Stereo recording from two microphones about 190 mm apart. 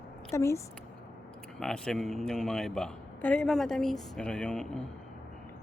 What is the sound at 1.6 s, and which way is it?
A man's voice, 5° left (ahead or behind).